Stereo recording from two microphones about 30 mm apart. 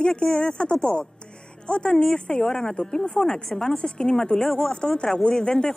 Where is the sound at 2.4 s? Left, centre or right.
Centre.